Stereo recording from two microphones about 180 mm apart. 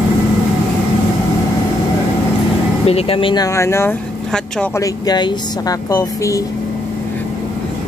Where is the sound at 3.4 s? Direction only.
15° left (ahead or behind).